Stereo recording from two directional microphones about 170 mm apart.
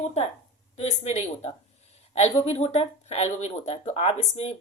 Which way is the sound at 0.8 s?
40° left (ahead or behind).